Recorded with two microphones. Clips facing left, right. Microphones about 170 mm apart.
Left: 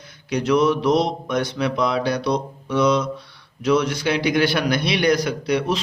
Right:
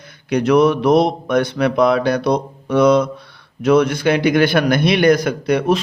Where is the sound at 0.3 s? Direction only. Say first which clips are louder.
Right 5 dB; 60° right (ahead or behind).